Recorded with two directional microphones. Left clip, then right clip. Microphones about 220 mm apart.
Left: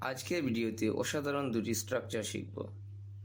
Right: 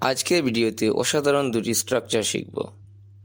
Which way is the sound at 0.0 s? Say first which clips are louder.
Right 14 dB; 50° right (ahead or behind).